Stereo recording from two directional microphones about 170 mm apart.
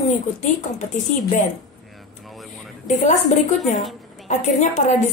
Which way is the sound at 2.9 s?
45° left (ahead or behind).